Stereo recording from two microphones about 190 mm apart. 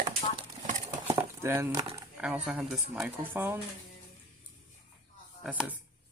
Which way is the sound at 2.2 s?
5° right (ahead or behind).